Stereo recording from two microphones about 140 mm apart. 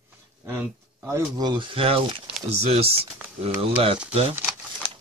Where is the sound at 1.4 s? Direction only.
30° right (ahead or behind).